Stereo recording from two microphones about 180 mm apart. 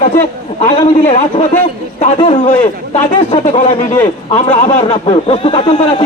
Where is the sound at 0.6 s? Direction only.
45° left (ahead or behind).